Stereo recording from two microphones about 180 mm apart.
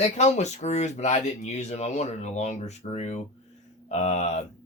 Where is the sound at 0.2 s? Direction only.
40° left (ahead or behind).